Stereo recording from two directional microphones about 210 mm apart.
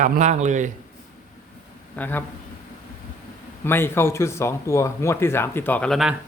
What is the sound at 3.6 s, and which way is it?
Speech, 10° left (ahead or behind).